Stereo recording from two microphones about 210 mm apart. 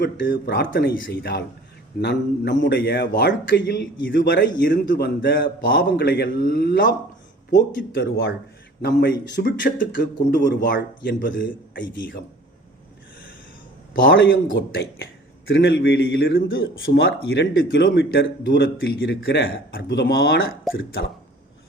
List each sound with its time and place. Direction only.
0.0 s a man's voice: 45° left (ahead or behind)
14.1 s speech: 60° left (ahead or behind)
14.4 s a man's voice: 45° left (ahead or behind)
16.8 s a man's voice: 65° left (ahead or behind)